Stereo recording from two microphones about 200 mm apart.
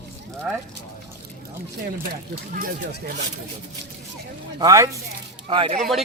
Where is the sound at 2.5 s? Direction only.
45° right (ahead or behind).